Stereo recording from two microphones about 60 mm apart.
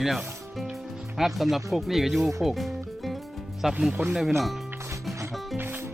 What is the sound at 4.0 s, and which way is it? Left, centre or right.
Speech, right.